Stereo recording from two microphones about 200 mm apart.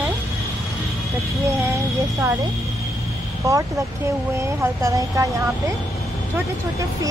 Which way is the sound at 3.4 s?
15° right (ahead or behind).